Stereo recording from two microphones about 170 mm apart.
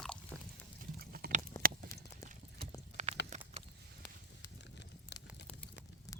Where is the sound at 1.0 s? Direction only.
65° right (ahead or behind).